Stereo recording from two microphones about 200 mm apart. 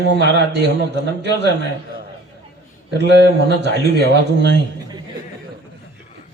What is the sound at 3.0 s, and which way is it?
Mantra, 60° right (ahead or behind).